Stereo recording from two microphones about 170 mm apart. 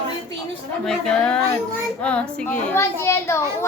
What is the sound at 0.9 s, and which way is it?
A woman's voice, 5° left (ahead or behind).